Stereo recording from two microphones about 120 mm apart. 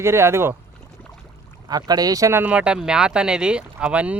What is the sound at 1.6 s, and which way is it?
Speech, 35° right (ahead or behind).